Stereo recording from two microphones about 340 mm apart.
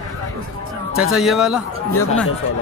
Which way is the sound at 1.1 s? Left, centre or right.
Centre.